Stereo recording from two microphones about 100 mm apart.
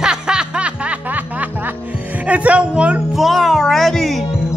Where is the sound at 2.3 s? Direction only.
15° right (ahead or behind).